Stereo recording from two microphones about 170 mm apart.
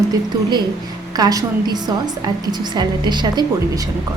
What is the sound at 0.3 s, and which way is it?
A woman's voice, 25° right (ahead or behind).